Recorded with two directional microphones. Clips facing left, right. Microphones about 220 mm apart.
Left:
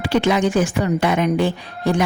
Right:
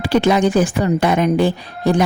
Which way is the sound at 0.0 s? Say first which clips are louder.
Right 3 dB; 40° right (ahead or behind).